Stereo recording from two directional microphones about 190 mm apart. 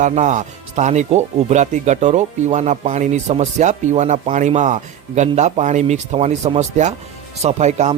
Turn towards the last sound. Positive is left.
turn(degrees=-35)  # may be behind; listen again after turning